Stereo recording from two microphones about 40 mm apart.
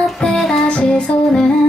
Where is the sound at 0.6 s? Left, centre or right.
Left.